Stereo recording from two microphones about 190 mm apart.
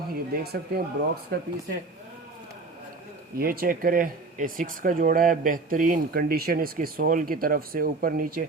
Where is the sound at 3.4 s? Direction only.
50° right (ahead or behind).